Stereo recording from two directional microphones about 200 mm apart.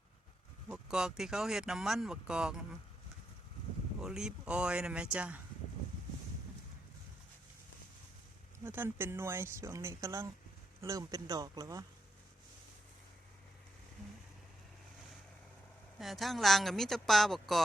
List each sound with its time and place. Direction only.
0.7 s speech: 5° right (ahead or behind)
4.0 s speech: 5° right (ahead or behind)
8.6 s speech: 10° right (ahead or behind)
16.0 s speech: centre (ahead or behind)